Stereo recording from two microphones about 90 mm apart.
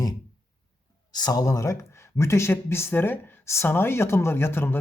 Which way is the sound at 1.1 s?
50° left (ahead or behind).